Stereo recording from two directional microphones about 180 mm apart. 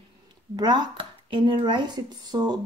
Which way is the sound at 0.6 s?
25° right (ahead or behind).